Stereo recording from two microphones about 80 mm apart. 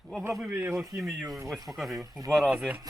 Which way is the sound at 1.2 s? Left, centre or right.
Right.